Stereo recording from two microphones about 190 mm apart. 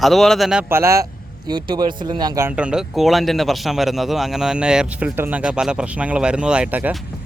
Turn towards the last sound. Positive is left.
turn(degrees=-5)  # may be behind; listen again after turning